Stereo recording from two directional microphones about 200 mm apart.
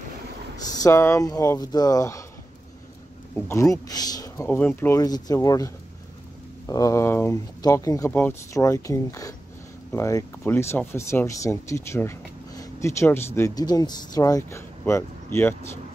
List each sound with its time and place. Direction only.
0.7 s speech: 15° left (ahead or behind)
3.3 s speech: 15° left (ahead or behind)